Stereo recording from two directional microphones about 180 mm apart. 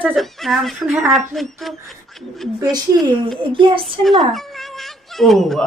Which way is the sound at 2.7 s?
20° right (ahead or behind).